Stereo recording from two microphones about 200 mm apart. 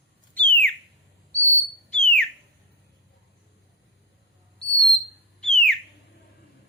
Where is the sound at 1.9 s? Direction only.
5° left (ahead or behind).